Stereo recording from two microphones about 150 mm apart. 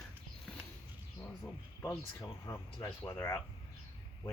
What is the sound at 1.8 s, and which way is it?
Speech, 20° left (ahead or behind).